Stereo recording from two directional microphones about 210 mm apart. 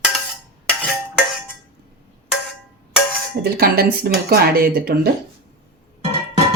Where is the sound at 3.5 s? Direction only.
45° right (ahead or behind).